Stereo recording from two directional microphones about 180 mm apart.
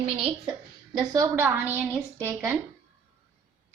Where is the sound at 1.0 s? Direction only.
20° right (ahead or behind).